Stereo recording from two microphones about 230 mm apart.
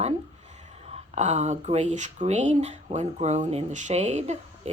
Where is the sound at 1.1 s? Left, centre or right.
Right.